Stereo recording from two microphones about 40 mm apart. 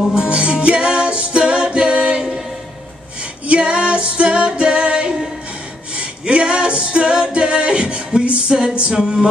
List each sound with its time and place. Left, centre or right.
0.1 s music: right
3.4 s female singing: right
5.9 s a capella: right